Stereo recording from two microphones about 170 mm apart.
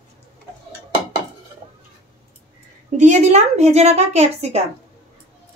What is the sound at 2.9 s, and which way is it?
A woman's voice, 45° right (ahead or behind).